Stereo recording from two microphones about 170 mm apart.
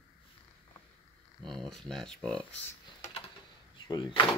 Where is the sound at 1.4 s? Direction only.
5° left (ahead or behind).